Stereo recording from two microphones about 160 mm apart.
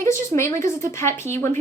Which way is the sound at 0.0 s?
15° left (ahead or behind).